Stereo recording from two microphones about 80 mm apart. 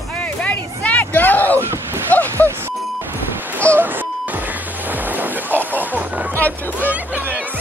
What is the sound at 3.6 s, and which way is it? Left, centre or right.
Music, right.